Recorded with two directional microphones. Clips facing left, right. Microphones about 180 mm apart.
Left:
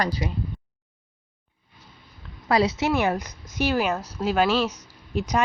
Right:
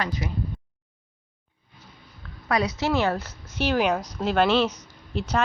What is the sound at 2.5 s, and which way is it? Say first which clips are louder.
Speech: left 3 dB; 30° left (ahead or behind).